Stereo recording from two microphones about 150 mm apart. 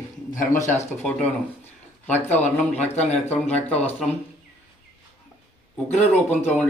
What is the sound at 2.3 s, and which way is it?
Speech, 10° left (ahead or behind).